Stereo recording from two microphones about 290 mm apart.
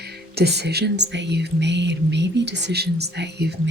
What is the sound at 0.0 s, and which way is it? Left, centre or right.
Speech, right.